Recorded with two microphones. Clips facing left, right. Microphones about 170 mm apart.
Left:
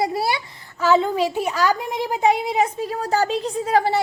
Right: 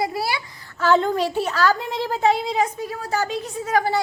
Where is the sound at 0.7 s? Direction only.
5° left (ahead or behind); by 4.0 s 30° left (ahead or behind).